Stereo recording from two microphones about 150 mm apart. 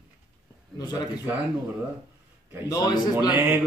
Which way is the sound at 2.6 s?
25° left (ahead or behind).